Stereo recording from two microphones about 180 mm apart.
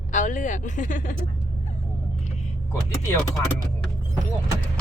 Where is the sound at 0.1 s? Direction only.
45° left (ahead or behind).